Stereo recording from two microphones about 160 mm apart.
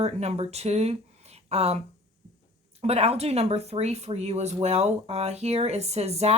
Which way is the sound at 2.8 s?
40° right (ahead or behind).